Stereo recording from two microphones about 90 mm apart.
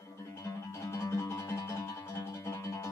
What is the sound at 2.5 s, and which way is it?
Music, 35° left (ahead or behind).